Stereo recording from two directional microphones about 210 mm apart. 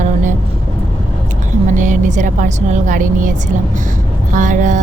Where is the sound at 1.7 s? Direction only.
35° right (ahead or behind).